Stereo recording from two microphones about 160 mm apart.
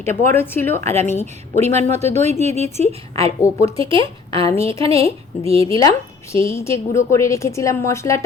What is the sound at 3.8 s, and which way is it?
Speech, 35° right (ahead or behind).